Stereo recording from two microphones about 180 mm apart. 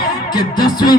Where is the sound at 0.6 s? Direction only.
20° left (ahead or behind).